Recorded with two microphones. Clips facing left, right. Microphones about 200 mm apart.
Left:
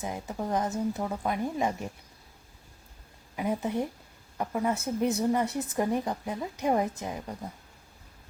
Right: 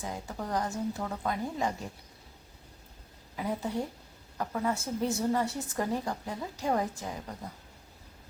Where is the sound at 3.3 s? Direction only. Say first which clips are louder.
Left 3 dB; 20° left (ahead or behind).